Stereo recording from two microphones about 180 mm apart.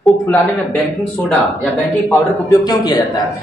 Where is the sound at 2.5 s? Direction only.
20° left (ahead or behind).